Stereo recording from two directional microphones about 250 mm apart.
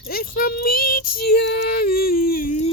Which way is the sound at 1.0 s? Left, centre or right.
Left.